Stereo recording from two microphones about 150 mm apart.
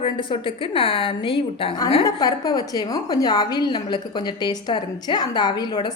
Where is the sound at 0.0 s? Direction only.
35° left (ahead or behind).